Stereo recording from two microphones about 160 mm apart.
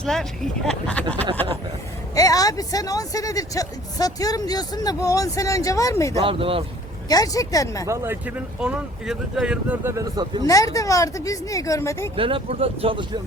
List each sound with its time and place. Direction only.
0.0 s speech: 5° left (ahead or behind)
2.1 s speech: 20° left (ahead or behind)
6.1 s speech: 35° right (ahead or behind)
7.1 s speech: 20° left (ahead or behind)
7.9 s speech: 15° right (ahead or behind)
9.9 s a man's voice: 25° right (ahead or behind)
10.4 s speech: 20° left (ahead or behind)
12.1 s speech: 35° right (ahead or behind)